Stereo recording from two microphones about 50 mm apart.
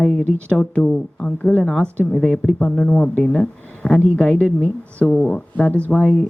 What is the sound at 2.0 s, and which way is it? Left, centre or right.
Speech, centre.